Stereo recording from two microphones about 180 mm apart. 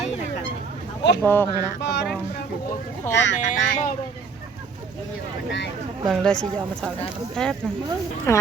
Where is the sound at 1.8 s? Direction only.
70° left (ahead or behind).